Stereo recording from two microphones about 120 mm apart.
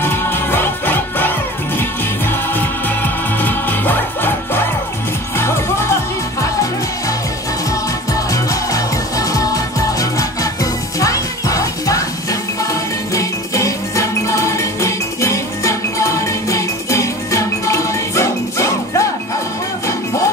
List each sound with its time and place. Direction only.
0.0 s music: 20° left (ahead or behind)